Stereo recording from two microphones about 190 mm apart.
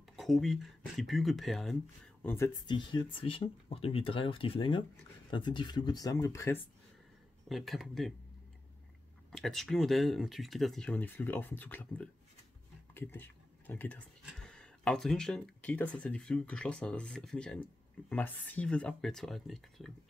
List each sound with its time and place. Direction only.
0.1 s speech: centre (ahead or behind)
2.2 s speech: 15° left (ahead or behind)
7.4 s speech: centre (ahead or behind)
9.3 s speech: centre (ahead or behind)